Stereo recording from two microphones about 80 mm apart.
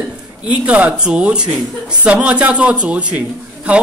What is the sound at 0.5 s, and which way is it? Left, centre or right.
A man's voice, centre.